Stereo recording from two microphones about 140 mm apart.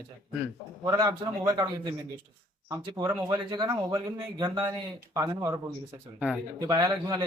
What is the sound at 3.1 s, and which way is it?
Speech, 25° right (ahead or behind).